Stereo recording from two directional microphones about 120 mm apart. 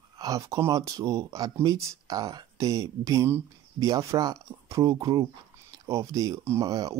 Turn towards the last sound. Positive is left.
turn(degrees=-30)  # may be behind; listen again after turning